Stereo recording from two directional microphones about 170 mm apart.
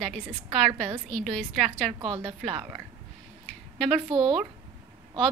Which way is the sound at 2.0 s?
30° right (ahead or behind).